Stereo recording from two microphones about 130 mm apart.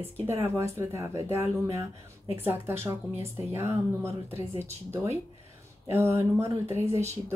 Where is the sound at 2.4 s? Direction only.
20° right (ahead or behind).